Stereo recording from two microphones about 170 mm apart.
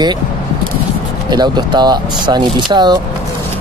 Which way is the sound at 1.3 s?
25° right (ahead or behind).